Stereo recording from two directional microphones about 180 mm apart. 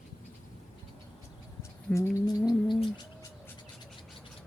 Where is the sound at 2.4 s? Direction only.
5° right (ahead or behind).